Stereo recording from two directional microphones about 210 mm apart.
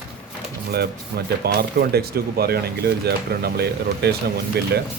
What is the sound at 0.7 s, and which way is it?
Speech, 50° right (ahead or behind).